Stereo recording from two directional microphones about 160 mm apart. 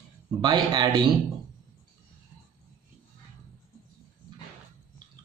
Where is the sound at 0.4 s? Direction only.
25° right (ahead or behind).